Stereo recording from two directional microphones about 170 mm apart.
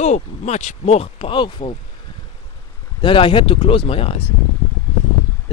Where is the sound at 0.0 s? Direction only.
40° left (ahead or behind).